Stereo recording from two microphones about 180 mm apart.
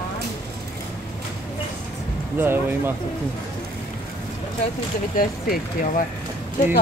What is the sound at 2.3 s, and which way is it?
Speech, 10° right (ahead or behind).